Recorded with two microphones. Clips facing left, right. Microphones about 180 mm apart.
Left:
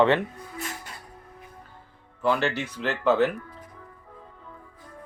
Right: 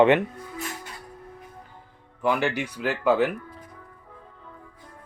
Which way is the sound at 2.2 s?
15° right (ahead or behind).